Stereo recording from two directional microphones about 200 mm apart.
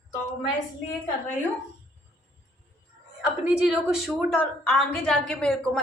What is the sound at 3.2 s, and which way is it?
A woman's voice, 5° right (ahead or behind).